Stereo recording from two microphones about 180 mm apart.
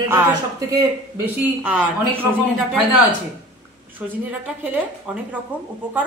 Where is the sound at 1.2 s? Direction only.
10° right (ahead or behind).